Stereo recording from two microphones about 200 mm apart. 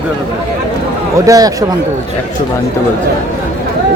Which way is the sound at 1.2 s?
15° right (ahead or behind).